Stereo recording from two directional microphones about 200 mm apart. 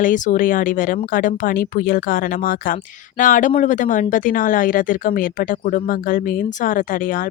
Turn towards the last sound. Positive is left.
turn(degrees=40)  # may be behind; listen again after turning